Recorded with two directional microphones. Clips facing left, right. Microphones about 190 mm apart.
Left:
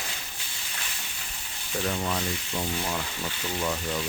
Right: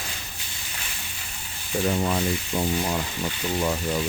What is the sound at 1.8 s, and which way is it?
Frying, 25° right (ahead or behind).